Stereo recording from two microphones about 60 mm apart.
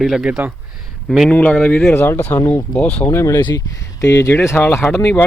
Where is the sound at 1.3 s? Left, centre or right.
Centre.